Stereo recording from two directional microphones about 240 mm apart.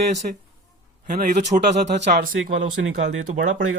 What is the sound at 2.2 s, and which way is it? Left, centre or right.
Speech, right.